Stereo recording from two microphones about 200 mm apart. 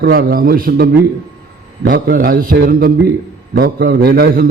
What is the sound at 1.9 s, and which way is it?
A man's voice, 50° right (ahead or behind).